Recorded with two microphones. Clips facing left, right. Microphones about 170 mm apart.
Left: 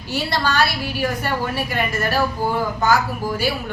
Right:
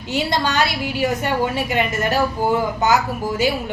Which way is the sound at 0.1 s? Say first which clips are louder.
Right 1 dB; 20° right (ahead or behind).